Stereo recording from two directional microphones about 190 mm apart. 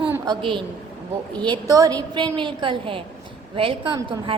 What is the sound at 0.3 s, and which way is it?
A woman's voice, 25° right (ahead or behind).